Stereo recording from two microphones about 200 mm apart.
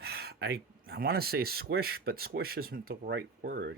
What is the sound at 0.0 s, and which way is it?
Speech, 55° right (ahead or behind).